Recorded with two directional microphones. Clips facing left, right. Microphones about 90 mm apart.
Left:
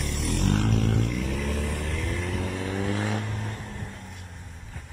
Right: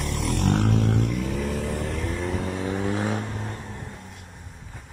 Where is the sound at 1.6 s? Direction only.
30° right (ahead or behind).